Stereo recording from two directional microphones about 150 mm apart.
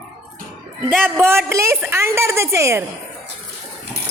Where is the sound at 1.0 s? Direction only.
15° right (ahead or behind).